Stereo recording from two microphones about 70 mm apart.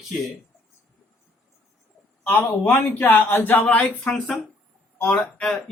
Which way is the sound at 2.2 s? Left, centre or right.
Left.